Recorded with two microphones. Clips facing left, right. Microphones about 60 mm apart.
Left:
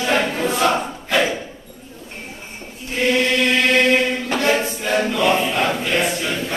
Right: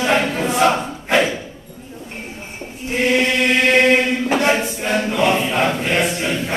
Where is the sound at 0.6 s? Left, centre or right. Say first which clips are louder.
Right 2 dB; centre.